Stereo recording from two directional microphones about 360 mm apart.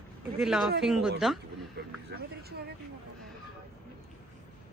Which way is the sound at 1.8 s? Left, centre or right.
Right.